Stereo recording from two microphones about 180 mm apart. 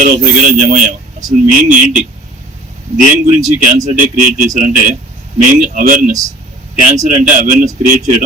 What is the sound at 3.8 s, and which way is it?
Speech, 45° right (ahead or behind).